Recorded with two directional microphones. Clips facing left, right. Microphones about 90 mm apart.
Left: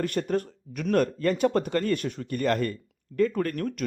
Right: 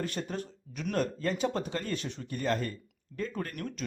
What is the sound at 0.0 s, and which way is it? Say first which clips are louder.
Speech: left 8 dB; 55° left (ahead or behind).